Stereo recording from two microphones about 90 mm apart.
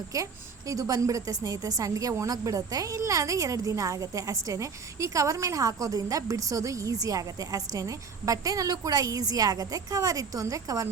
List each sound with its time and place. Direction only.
0.1 s a woman's voice: 40° right (ahead or behind)